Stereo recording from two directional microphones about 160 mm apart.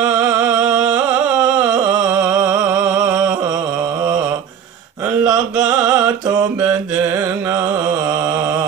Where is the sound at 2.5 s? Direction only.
20° right (ahead or behind).